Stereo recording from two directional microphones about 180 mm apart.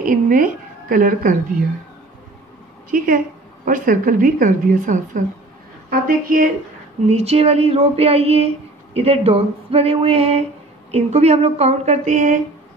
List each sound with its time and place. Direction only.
0.0 s a woman's voice: 50° right (ahead or behind)
2.9 s speech: 55° right (ahead or behind)
7.1 s speech: 35° right (ahead or behind)